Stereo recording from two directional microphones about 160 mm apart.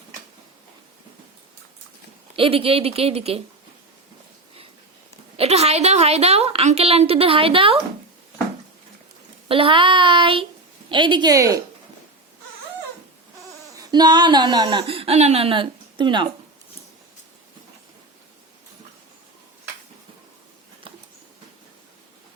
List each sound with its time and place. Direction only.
2.3 s speech: 35° right (ahead or behind)
5.4 s a woman's voice: 40° right (ahead or behind)
9.5 s speech: 35° right (ahead or behind)
13.7 s a woman's voice: 25° right (ahead or behind)